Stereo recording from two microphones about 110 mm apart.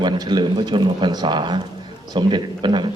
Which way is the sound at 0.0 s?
40° right (ahead or behind).